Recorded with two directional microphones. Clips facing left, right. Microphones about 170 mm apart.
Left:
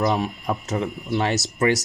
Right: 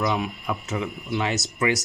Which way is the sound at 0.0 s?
45° left (ahead or behind).